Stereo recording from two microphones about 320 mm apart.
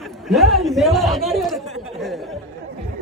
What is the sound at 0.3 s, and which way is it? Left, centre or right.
A man's voice, centre.